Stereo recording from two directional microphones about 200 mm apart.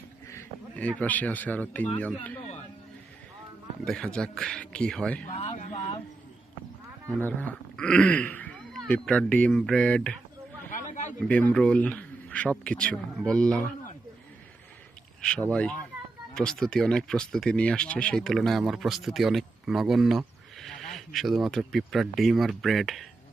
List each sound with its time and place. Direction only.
0.3 s speech: 10° left (ahead or behind)
3.8 s speech: 5° left (ahead or behind)
5.3 s a sound: 30° left (ahead or behind)
7.2 s speech: 10° left (ahead or behind)
10.7 s a sound: 40° left (ahead or behind)
11.3 s speech: 5° left (ahead or behind)
15.2 s speech: 5° left (ahead or behind)